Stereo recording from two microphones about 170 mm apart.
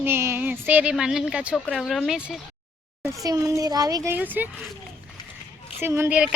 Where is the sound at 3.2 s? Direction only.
20° right (ahead or behind).